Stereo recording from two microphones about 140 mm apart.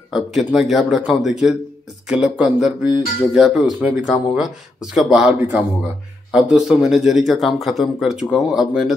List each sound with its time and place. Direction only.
0.1 s speech: centre (ahead or behind)
6.3 s speech: 5° right (ahead or behind)